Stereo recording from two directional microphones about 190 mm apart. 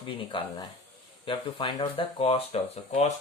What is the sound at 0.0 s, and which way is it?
Speech, 25° left (ahead or behind).